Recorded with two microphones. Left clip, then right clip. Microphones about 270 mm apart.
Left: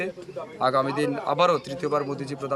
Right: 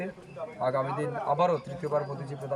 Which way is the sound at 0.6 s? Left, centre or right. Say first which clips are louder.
Left 6 dB; centre.